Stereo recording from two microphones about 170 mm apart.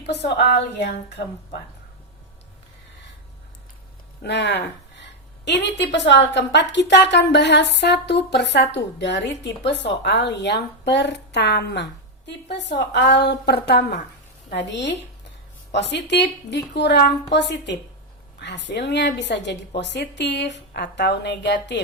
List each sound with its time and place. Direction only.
0.0 s a woman's voice: 85° left
4.2 s a woman's voice: 85° left
14.5 s a woman's voice: 90° left